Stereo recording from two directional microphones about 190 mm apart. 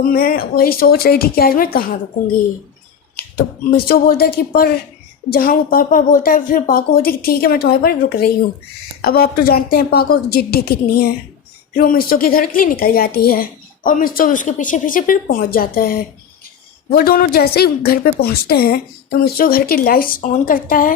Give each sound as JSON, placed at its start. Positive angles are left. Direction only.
{"t": 0.1, "sound": "a woman's voice", "side_deg": 50}
{"t": 3.2, "sound": "a woman's voice", "side_deg": 50}